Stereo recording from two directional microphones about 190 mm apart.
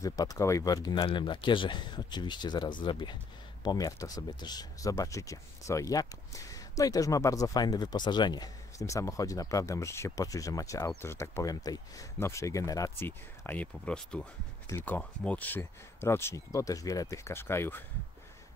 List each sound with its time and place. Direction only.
0.0 s speech: 20° left (ahead or behind)